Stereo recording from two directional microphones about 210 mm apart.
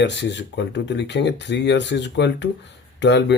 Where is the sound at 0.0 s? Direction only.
55° left (ahead or behind).